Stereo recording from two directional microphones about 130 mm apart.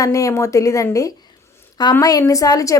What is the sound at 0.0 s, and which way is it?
A woman's voice, 25° left (ahead or behind).